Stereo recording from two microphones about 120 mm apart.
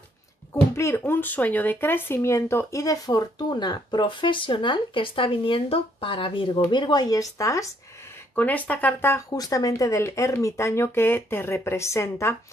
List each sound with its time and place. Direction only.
0.5 s speech: 25° left (ahead or behind)
8.4 s speech: 15° left (ahead or behind)
9.3 s speech: 30° left (ahead or behind)